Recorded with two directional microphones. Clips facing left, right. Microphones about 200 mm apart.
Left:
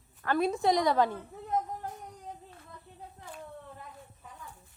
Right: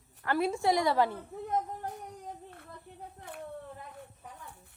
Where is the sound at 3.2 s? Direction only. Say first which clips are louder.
Right 2 dB; 60° right (ahead or behind).